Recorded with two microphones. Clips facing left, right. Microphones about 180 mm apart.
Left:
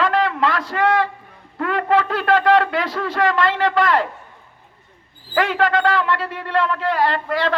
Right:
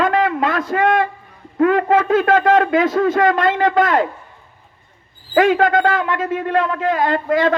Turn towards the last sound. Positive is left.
turn(degrees=-50)  # may be behind; listen again after turning